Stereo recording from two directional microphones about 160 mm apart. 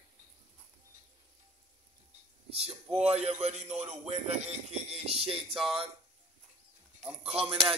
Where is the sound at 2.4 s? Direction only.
35° right (ahead or behind).